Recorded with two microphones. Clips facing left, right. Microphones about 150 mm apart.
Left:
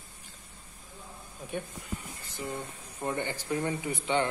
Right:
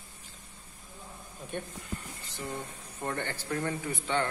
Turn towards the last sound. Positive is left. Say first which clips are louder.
# left 2 dB
turn(degrees=15)  # may be behind; listen again after turning